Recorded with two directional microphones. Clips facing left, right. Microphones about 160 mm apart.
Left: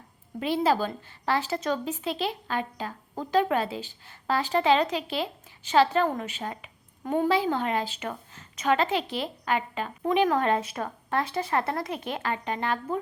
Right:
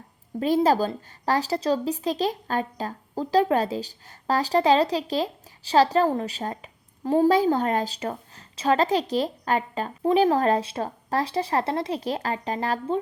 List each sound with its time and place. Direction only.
0.3 s speech: 40° right (ahead or behind)